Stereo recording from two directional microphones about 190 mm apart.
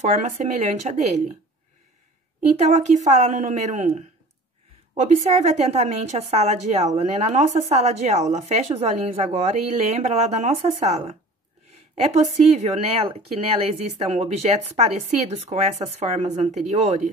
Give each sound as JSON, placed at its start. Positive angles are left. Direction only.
{"t": 0.1, "sound": "a woman's voice", "side_deg": -40}
{"t": 2.5, "sound": "a woman's voice", "side_deg": -35}
{"t": 5.2, "sound": "a woman's voice", "side_deg": -35}